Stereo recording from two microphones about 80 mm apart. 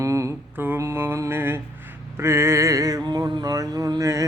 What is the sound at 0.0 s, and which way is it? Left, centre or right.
Mantra, right.